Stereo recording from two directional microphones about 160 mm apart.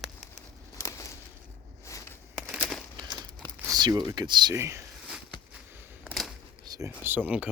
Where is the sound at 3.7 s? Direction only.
25° right (ahead or behind).